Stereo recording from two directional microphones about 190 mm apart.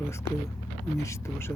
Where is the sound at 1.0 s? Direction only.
15° left (ahead or behind).